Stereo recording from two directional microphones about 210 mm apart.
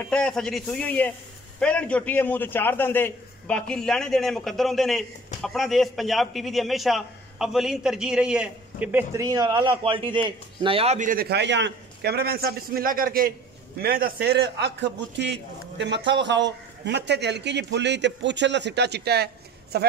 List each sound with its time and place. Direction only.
0.1 s a man's voice: 5° left (ahead or behind); by 19.9 s 50° right (ahead or behind)